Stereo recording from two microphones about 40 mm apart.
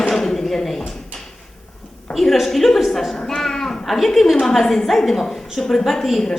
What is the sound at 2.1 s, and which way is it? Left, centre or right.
Speech, centre.